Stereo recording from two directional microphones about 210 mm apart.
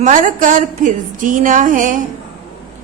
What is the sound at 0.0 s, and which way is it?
A woman's voice, 40° right (ahead or behind).